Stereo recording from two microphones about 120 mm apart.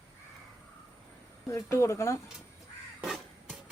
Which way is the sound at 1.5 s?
25° left (ahead or behind).